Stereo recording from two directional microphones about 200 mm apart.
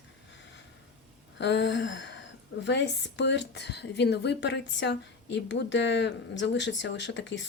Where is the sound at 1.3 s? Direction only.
60° left (ahead or behind).